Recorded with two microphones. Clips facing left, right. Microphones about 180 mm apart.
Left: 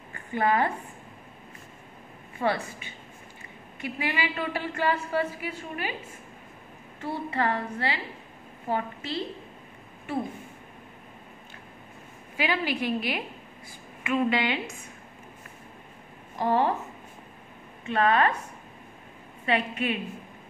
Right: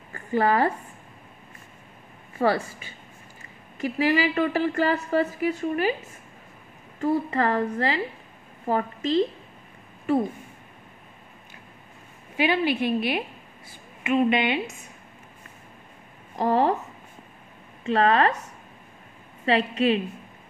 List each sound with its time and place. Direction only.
0.1 s a woman's voice: 40° right (ahead or behind)
2.4 s a woman's voice: 45° right (ahead or behind)
3.8 s a woman's voice: 40° right (ahead or behind)
7.2 s a woman's voice: 40° right (ahead or behind)
12.4 s a woman's voice: 25° right (ahead or behind)
16.3 s a woman's voice: 35° right (ahead or behind)
17.8 s a woman's voice: 35° right (ahead or behind)
19.4 s a woman's voice: 35° right (ahead or behind)